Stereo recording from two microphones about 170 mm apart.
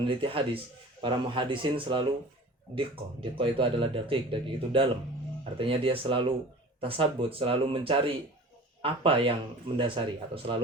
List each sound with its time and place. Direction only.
0.2 s speech: 30° right (ahead or behind)